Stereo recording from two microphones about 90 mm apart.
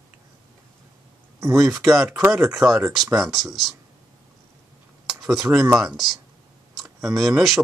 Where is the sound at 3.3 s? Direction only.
Centre (ahead or behind).